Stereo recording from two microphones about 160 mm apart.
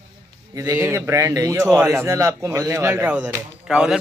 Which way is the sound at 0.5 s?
20° right (ahead or behind).